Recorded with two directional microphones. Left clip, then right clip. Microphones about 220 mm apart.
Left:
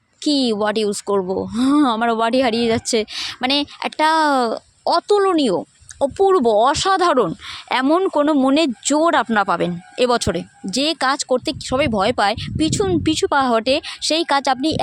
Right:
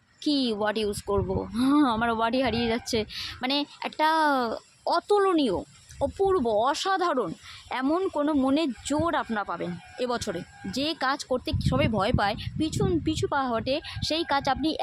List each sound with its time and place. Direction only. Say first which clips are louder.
0.3 s speech: left 8 dB; 35° left (ahead or behind)